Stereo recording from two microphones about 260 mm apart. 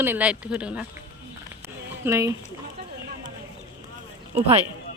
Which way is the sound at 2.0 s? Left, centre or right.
Centre.